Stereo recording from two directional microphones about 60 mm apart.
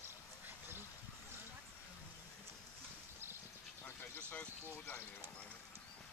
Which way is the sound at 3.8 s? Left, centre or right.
Left.